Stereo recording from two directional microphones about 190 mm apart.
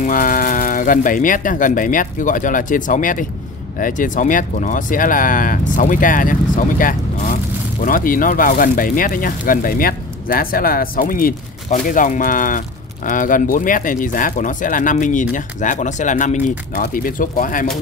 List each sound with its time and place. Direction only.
0.0 s speech: 45° left (ahead or behind)